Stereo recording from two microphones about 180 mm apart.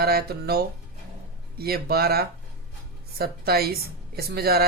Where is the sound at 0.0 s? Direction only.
60° right (ahead or behind).